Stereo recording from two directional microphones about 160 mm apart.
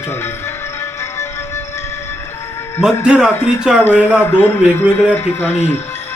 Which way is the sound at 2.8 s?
5° right (ahead or behind).